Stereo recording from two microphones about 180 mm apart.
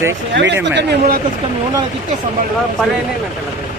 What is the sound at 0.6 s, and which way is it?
Speech, 70° right (ahead or behind).